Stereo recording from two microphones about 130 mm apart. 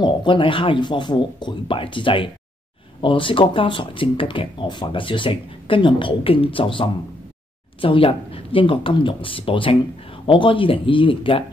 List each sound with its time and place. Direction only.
0.0 s speech: 40° left (ahead or behind)